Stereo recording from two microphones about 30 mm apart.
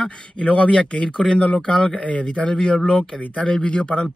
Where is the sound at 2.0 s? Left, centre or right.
Left.